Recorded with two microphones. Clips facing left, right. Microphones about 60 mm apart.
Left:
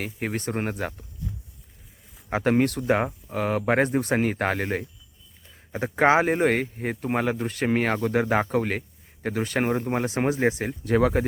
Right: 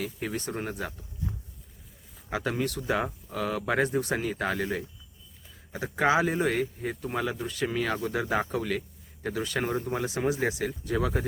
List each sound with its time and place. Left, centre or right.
0.0 s speech: left
2.3 s speech: left
10.8 s speech: left